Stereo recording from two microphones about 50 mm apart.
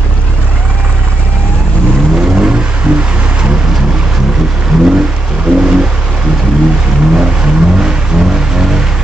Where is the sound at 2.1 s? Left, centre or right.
Right.